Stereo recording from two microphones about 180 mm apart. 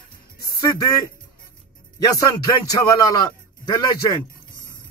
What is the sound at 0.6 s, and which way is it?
Speech, 20° left (ahead or behind).